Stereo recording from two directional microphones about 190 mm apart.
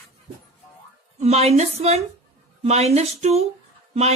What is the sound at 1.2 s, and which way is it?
A woman's voice, 35° right (ahead or behind).